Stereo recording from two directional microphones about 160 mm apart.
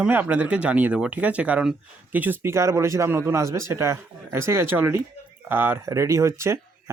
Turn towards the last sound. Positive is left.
turn(degrees=-15)  # may be behind; listen again after turning